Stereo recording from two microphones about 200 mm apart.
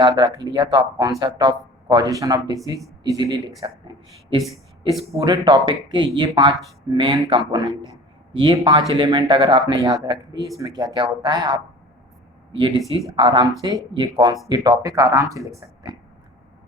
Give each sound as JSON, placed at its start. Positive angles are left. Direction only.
{"t": 0.0, "sound": "speech", "side_deg": -20}
{"t": 12.5, "sound": "speech", "side_deg": -25}